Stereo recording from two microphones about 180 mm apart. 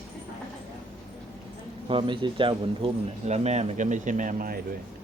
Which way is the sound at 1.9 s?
30° right (ahead or behind).